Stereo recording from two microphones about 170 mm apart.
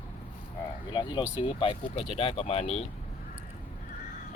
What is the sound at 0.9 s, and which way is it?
Speech, 25° left (ahead or behind).